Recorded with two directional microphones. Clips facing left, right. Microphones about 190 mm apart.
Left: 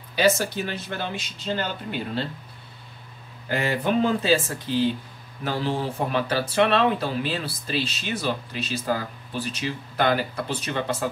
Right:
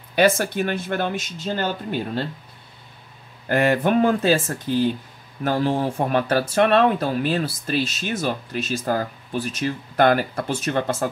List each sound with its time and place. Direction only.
0.1 s speech: 55° right (ahead or behind)
3.4 s speech: 55° right (ahead or behind)